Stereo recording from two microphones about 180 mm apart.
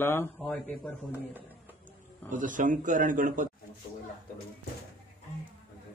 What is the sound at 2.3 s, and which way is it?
A man's voice, 45° right (ahead or behind).